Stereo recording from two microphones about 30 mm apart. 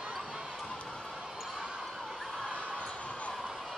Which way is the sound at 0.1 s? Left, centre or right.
Centre.